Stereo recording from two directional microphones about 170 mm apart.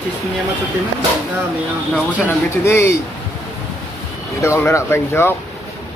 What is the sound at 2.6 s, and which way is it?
Speech, 15° left (ahead or behind).